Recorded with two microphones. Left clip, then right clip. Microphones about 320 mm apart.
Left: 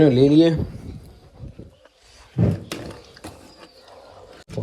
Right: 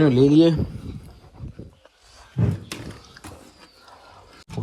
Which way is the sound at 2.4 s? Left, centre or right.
Centre.